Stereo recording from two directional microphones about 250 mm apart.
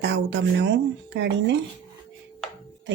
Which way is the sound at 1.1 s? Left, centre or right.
Right.